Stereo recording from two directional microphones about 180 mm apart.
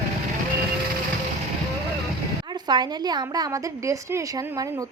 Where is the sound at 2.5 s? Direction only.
25° right (ahead or behind).